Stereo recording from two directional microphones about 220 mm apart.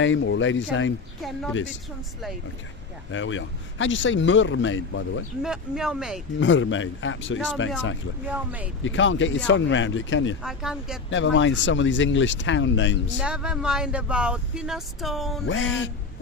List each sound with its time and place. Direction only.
0.0 s speech: 60° left (ahead or behind)
1.2 s speech: 5° left (ahead or behind)
1.5 s speech: 55° left (ahead or behind)
3.1 s speech: 60° left (ahead or behind)
5.4 s speech: centre (ahead or behind)
6.4 s speech: 60° left (ahead or behind)
8.3 s speech: 5° right (ahead or behind)
8.8 s speech: 60° left (ahead or behind)
10.4 s speech: 5° right (ahead or behind)
11.1 s speech: 60° left (ahead or behind)
13.1 s speech: 5° right (ahead or behind)
15.4 s speech: 60° left (ahead or behind)